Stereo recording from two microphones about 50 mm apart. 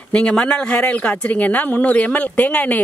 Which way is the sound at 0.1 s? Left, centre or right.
Left.